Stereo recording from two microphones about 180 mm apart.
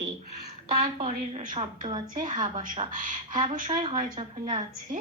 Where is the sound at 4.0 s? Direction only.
45° right (ahead or behind).